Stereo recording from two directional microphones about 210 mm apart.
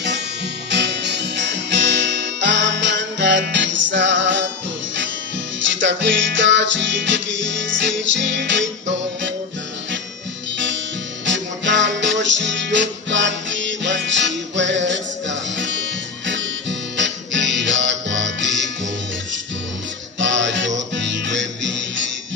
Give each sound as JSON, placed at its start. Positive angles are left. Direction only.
{"t": 0.7, "sound": "music", "side_deg": -55}
{"t": 5.6, "sound": "music", "side_deg": -60}
{"t": 11.2, "sound": "music", "side_deg": -60}
{"t": 20.2, "sound": "music", "side_deg": -60}